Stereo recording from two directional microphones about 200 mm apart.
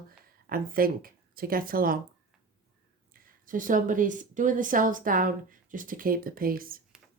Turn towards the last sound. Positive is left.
turn(degrees=-45)  # may be behind; listen again after turning